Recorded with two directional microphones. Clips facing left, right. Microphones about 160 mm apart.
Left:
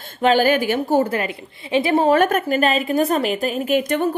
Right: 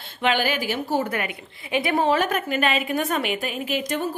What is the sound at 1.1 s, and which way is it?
Speech, 25° left (ahead or behind).